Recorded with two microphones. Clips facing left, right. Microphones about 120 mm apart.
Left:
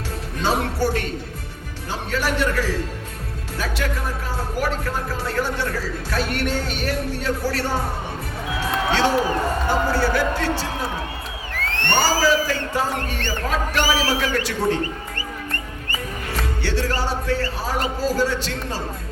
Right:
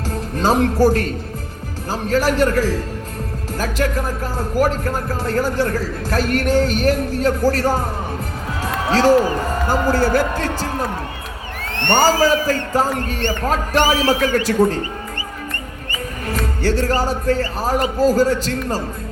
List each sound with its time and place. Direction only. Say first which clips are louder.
0.1 s music: right 5 dB; 40° right (ahead or behind)
0.8 s a man's voice: right 7 dB; 40° right (ahead or behind)
8.9 s a man's voice: right 7 dB; 40° right (ahead or behind)
11.9 s speech: right 4 dB; 50° right (ahead or behind)
13.7 s speech: right 6 dB; 55° right (ahead or behind)
16.6 s speech: right 6 dB; 45° right (ahead or behind)